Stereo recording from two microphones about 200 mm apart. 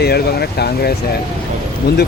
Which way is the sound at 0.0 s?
50° left (ahead or behind).